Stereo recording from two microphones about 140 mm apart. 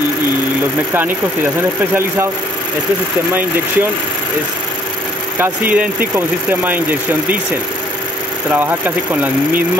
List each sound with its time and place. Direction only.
0.9 s speech: 15° right (ahead or behind)
3.3 s speech: 15° right (ahead or behind)
5.4 s speech: 15° right (ahead or behind)
8.5 s speech: 15° right (ahead or behind)